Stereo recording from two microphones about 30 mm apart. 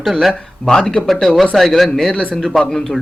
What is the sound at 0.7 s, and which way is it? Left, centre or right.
Speech, left.